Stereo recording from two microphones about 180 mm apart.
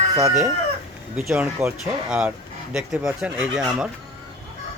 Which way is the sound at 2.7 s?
5° right (ahead or behind).